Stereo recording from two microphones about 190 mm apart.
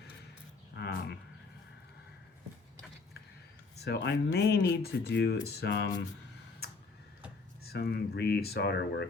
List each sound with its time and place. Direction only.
0.8 s a sound: 60° left (ahead or behind)
3.8 s speech: 65° left (ahead or behind)
7.7 s speech: 55° left (ahead or behind)